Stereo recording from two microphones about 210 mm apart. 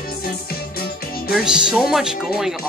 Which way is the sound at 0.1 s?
45° left (ahead or behind).